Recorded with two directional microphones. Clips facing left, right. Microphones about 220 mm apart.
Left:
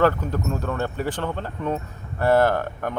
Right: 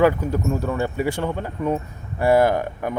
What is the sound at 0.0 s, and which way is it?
Speech, 10° right (ahead or behind).